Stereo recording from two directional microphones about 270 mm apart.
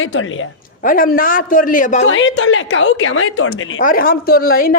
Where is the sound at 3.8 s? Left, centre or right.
Left.